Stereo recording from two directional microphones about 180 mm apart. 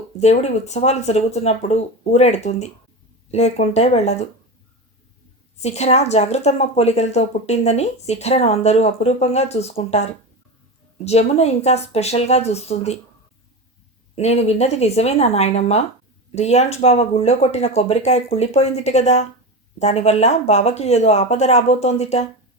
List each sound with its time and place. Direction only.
0.2 s a woman's voice: 40° left (ahead or behind)
5.6 s a woman's voice: 35° left (ahead or behind)
14.2 s a woman's voice: 35° left (ahead or behind)